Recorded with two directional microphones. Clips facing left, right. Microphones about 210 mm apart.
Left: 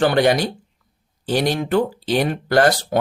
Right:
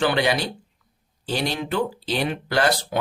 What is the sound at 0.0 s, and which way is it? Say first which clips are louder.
Speech: left 5 dB; 50° left (ahead or behind).